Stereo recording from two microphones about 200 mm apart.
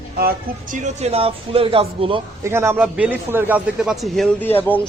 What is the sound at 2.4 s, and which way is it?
A man's voice, 10° right (ahead or behind).